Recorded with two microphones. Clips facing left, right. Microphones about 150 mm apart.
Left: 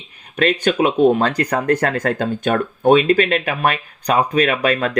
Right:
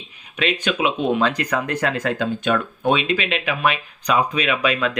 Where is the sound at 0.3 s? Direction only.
45° left (ahead or behind).